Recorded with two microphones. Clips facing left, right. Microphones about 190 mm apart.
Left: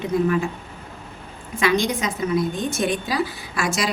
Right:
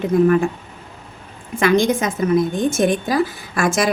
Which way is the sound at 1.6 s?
50° right (ahead or behind).